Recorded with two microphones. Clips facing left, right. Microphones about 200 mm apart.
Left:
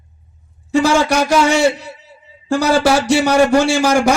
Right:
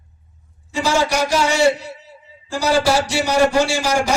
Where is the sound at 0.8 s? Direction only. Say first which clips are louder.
Left 1 dB; 55° left (ahead or behind).